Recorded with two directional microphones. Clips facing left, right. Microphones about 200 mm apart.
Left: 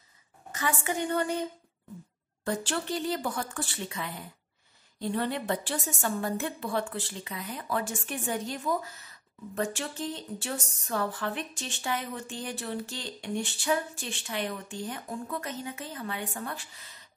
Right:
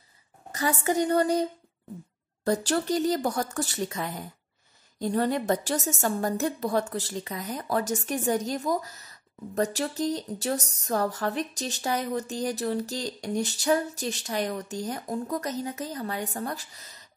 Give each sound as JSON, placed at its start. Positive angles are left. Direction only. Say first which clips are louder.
{"t": 0.5, "sound": "a woman's voice", "louder": "right 5 dB", "side_deg": -40}